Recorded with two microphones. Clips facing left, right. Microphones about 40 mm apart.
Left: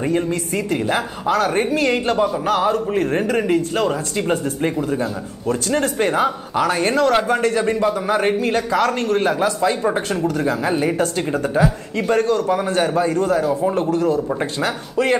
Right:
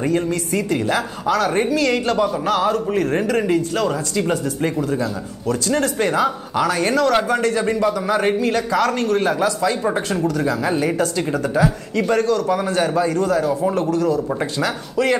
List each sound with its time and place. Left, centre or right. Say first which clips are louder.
0.1 s a man's voice: even; left
12.1 s speech: left 1 dB; left